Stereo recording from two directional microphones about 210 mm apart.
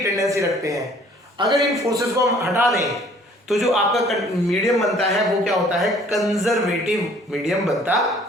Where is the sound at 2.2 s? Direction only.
15° right (ahead or behind).